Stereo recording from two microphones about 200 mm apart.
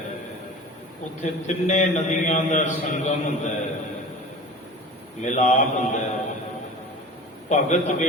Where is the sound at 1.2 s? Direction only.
35° left (ahead or behind).